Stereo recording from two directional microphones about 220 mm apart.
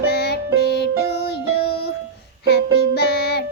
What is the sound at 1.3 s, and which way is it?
Music, 45° left (ahead or behind).